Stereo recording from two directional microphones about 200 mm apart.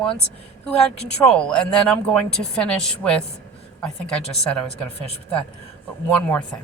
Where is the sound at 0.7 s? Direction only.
30° left (ahead or behind).